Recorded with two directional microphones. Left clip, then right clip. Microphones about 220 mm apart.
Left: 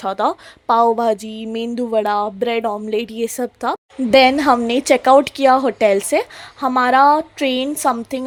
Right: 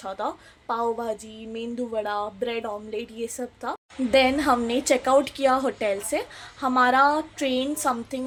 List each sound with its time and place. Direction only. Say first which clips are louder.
0.0 s a woman's voice: left 11 dB; 40° left (ahead or behind)